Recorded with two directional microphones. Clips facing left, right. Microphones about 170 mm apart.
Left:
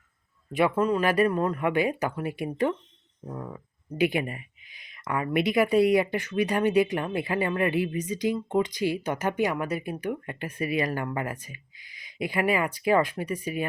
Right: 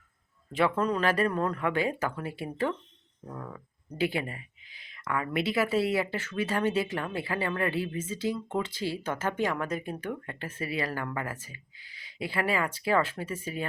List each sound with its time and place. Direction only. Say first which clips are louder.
0.5 s speech: left 3 dB; 10° left (ahead or behind)